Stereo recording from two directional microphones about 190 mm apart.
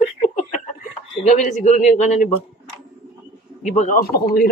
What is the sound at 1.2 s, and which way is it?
Speech, 40° left (ahead or behind).